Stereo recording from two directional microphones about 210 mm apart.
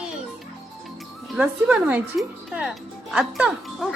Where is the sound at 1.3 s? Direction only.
5° right (ahead or behind).